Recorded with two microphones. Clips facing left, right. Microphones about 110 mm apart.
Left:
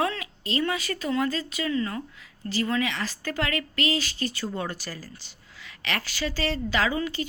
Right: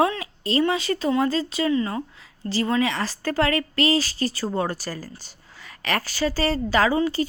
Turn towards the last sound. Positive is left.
turn(degrees=-35)  # may be behind; listen again after turning